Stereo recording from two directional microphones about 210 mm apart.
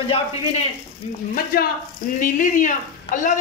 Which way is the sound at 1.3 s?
45° left (ahead or behind).